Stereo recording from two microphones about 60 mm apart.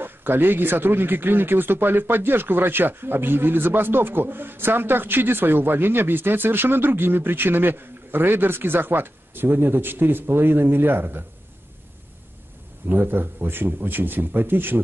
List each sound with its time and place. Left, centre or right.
0.0 s speech: right
12.8 s speech: right